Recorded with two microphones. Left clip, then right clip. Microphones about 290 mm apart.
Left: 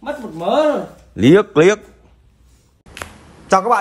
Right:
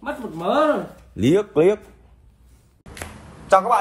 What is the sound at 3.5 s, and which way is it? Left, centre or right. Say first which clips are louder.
Speech: left 2 dB; left.